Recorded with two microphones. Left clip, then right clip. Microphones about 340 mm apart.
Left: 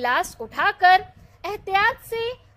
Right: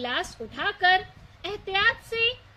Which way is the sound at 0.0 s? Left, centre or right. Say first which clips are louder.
Left 7 dB; centre.